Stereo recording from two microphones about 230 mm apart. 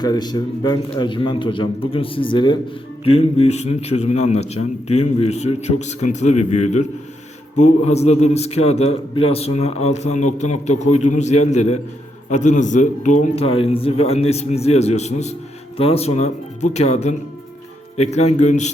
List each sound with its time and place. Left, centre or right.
0.0 s a man's voice: centre